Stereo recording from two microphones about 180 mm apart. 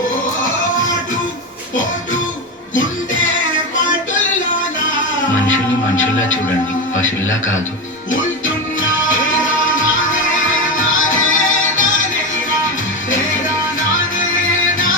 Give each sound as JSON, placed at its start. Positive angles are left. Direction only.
{"t": 6.9, "sound": "a man's voice", "side_deg": 90}
{"t": 9.0, "sound": "music", "side_deg": 90}
{"t": 14.6, "sound": "music", "side_deg": 90}